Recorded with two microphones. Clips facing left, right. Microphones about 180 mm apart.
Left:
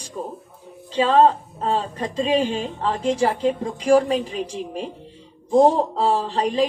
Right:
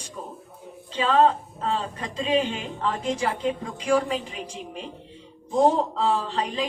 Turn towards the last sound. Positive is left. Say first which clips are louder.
# left 6 dB
turn(degrees=35)  # may be behind; listen again after turning